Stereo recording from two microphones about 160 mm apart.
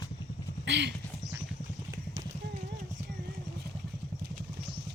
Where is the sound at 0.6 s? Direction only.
90° right.